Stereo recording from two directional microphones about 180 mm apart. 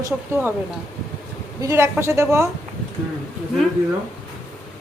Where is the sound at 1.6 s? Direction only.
15° right (ahead or behind).